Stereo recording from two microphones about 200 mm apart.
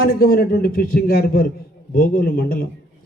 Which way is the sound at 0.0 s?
50° left (ahead or behind).